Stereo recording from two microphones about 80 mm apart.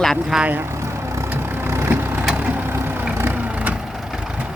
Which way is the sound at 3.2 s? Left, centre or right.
Right.